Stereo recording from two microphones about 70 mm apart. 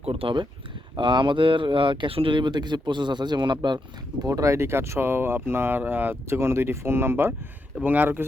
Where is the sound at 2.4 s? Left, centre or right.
Right.